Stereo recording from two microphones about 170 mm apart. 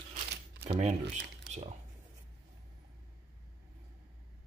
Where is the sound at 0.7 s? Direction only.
40° right (ahead or behind).